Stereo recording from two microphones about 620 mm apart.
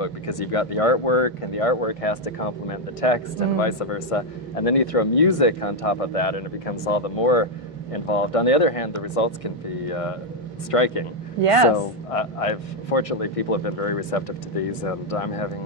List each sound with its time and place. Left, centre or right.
0.0 s speech: left
11.4 s speech: right
12.1 s speech: left